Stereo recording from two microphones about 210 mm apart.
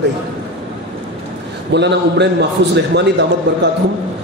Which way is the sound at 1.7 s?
55° right (ahead or behind).